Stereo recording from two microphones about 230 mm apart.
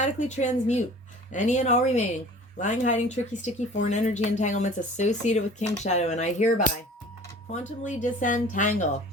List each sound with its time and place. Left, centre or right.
0.0 s speech: left